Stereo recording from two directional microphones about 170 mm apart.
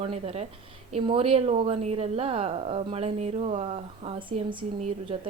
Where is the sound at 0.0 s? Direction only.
35° right (ahead or behind).